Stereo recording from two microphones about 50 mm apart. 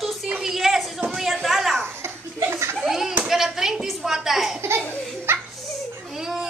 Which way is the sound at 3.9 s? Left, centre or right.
Centre.